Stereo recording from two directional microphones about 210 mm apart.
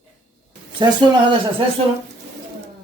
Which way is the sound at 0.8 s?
20° right (ahead or behind).